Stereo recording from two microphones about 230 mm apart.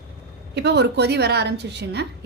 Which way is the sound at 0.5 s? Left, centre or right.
Right.